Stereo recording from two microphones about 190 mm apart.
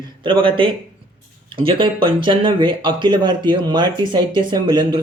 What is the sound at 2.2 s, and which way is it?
Speech, 25° right (ahead or behind).